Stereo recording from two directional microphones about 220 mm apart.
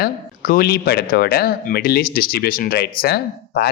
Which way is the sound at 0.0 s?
40° left (ahead or behind).